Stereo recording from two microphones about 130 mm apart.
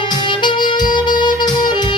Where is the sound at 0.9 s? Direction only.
35° left (ahead or behind).